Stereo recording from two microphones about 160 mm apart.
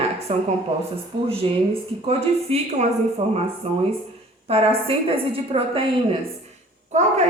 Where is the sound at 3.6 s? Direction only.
40° right (ahead or behind).